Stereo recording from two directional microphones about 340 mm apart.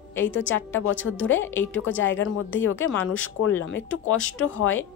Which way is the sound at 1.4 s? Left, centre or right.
Centre.